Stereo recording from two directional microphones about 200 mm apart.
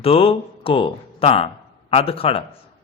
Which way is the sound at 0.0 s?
30° left (ahead or behind).